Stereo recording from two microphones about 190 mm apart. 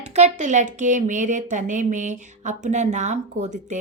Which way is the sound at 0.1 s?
40° right (ahead or behind).